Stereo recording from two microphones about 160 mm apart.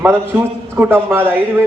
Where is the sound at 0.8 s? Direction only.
15° right (ahead or behind).